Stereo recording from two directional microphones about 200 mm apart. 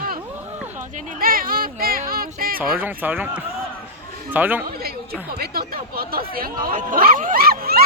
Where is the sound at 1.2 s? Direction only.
45° right (ahead or behind).